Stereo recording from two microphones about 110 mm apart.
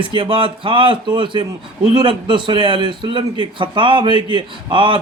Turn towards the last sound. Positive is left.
turn(degrees=-50)  # may be behind; listen again after turning